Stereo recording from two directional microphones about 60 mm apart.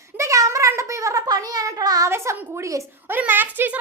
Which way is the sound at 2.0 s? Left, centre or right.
Right.